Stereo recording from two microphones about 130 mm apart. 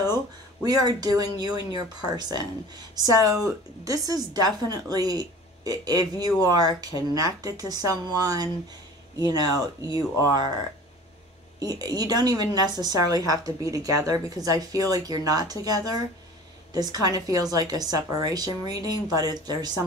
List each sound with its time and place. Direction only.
0.7 s a woman's voice: 30° right (ahead or behind)
11.6 s a woman's voice: 30° right (ahead or behind)